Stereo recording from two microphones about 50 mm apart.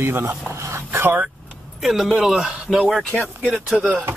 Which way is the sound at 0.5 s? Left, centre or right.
Right.